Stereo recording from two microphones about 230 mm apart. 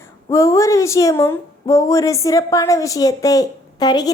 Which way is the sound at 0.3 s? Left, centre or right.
Centre.